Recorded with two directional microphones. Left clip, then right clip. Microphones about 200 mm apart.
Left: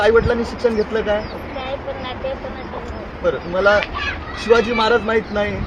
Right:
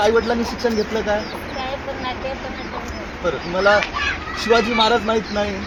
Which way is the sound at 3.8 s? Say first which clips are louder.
Even; 40° right (ahead or behind).